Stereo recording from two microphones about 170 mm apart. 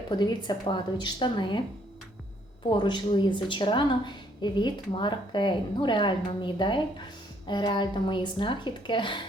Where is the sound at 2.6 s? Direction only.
25° left (ahead or behind).